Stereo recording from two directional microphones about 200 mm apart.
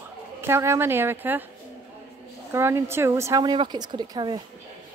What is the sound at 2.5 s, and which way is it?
Speech, 10° right (ahead or behind).